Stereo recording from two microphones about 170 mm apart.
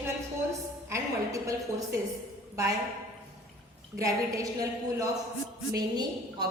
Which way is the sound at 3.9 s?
20° right (ahead or behind).